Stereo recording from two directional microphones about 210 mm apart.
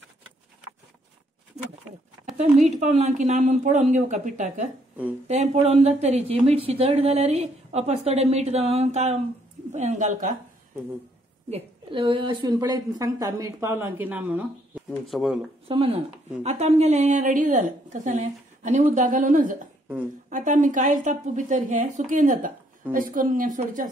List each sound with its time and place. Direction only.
2.3 s speech: 35° right (ahead or behind)
11.5 s a woman's voice: 25° right (ahead or behind); by 15.4 s centre (ahead or behind)
15.7 s speech: 25° right (ahead or behind)